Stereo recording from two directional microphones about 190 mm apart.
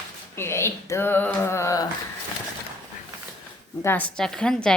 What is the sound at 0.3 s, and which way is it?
Speech, 15° left (ahead or behind).